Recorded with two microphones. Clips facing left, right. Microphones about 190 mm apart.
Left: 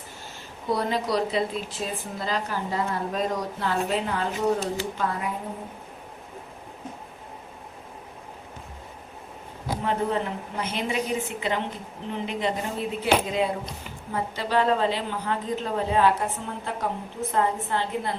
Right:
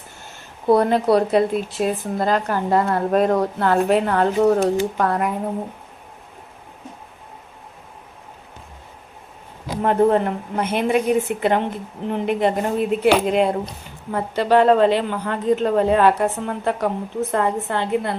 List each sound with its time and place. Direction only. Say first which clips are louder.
0.7 s speech: right 10 dB; 55° right (ahead or behind)
9.8 s speech: right 10 dB; 55° right (ahead or behind)
13.1 s a woman's voice: right 6 dB; 65° right (ahead or behind)